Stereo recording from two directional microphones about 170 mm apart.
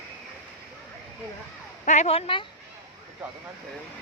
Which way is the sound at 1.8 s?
45° left (ahead or behind).